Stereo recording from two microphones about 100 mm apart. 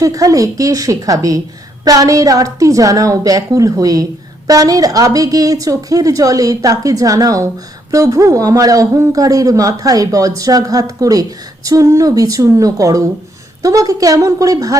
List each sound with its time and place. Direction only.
0.0 s speech: 35° right (ahead or behind)